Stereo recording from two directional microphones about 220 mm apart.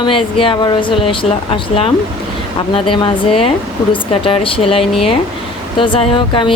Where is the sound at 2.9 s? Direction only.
25° left (ahead or behind).